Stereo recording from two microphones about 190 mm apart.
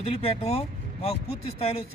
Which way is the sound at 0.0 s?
30° left (ahead or behind).